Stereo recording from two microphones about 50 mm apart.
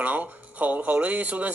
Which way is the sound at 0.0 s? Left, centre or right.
Right.